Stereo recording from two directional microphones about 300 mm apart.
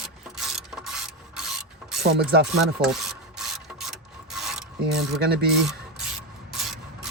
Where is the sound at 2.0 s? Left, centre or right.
Right.